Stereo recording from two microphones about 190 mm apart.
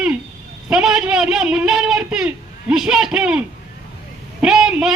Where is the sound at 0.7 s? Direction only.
5° right (ahead or behind).